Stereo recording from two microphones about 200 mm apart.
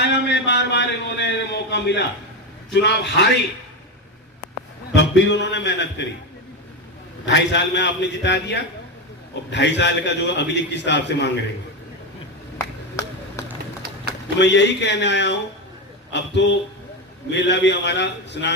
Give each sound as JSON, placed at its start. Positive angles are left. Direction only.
{"t": 0.0, "sound": "a sound", "side_deg": 60}
{"t": 2.7, "sound": "a man's voice", "side_deg": 60}
{"t": 4.9, "sound": "a man's voice", "side_deg": 65}
{"t": 7.3, "sound": "a man's voice", "side_deg": 60}
{"t": 12.5, "sound": "a sound", "side_deg": 15}
{"t": 14.3, "sound": "a man's voice", "side_deg": 60}